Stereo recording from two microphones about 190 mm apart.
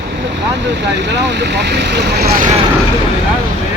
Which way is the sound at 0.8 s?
65° right (ahead or behind).